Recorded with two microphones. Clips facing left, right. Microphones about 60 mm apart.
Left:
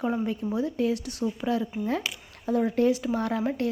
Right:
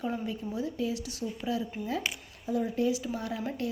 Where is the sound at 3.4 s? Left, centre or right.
Left.